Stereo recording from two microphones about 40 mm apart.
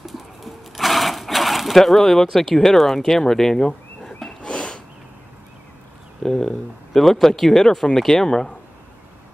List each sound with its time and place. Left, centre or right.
0.0 s sewing machine: centre
1.8 s speech: centre
4.4 s a sound: left
6.2 s speech: centre